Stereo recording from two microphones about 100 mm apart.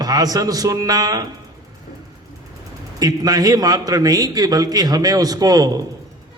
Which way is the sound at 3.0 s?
40° right (ahead or behind).